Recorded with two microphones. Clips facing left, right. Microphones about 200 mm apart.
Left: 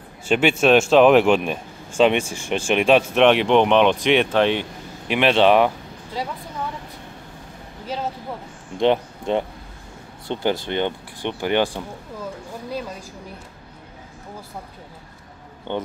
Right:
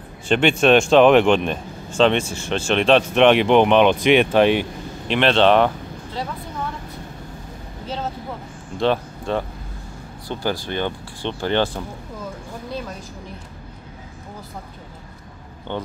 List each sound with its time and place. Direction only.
0.3 s speech: 5° left (ahead or behind)
5.0 s speech: 10° left (ahead or behind)
7.8 s speech: 10° left (ahead or behind)
15.7 s speech: 15° left (ahead or behind)